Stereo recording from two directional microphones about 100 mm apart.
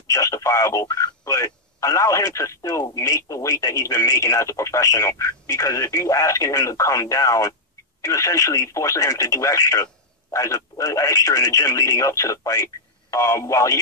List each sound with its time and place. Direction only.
0.1 s speech: 30° left (ahead or behind)